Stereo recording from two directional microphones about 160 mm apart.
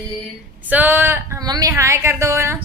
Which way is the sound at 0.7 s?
10° right (ahead or behind).